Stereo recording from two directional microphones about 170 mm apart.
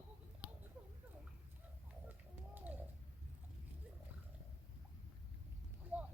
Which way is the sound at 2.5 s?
10° right (ahead or behind).